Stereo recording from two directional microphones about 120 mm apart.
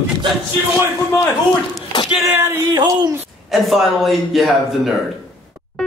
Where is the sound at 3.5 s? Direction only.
Centre (ahead or behind).